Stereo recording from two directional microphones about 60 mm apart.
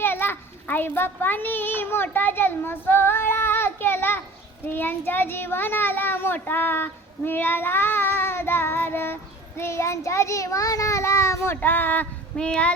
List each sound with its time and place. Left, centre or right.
0.0 s a child's voice: left
9.6 s a child's voice: left
11.5 s a child's voice: left
12.4 s speech: centre